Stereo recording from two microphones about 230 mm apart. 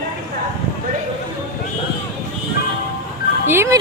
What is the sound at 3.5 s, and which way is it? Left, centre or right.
Music, centre.